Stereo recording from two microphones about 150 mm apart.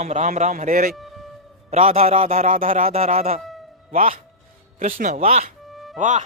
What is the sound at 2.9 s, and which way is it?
Speech, 45° right (ahead or behind).